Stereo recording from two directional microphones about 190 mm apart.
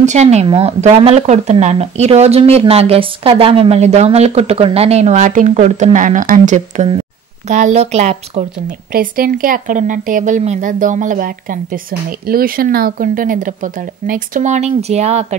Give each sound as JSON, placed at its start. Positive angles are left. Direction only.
{"t": 0.0, "sound": "speech", "side_deg": -35}